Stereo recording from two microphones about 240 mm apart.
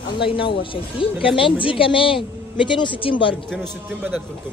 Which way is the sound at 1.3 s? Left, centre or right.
Left.